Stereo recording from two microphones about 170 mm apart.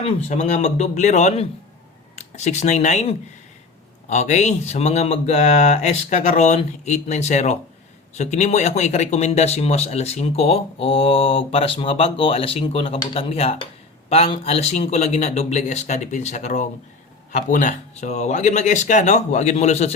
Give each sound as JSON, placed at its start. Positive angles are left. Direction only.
{"t": 0.0, "sound": "speech", "side_deg": 40}